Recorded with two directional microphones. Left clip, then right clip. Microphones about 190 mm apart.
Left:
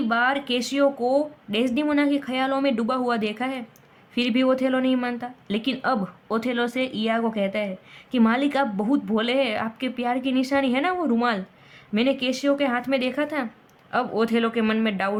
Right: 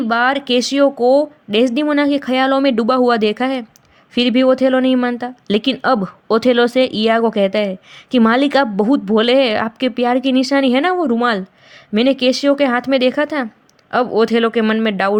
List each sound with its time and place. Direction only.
0.1 s speech: 40° right (ahead or behind)